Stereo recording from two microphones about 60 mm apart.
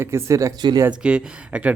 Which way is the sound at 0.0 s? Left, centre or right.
Right.